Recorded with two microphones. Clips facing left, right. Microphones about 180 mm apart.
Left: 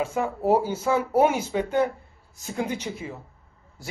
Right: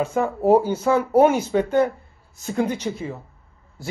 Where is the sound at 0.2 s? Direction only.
50° right (ahead or behind).